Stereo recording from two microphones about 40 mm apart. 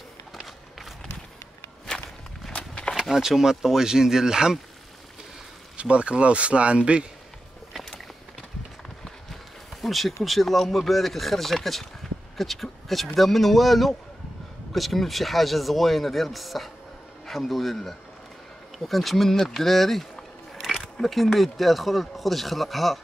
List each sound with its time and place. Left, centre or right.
2.5 s a sound: left
3.0 s speech: centre
5.8 s speech: right
9.8 s speech: centre